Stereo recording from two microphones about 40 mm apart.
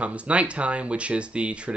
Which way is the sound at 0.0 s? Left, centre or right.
Right.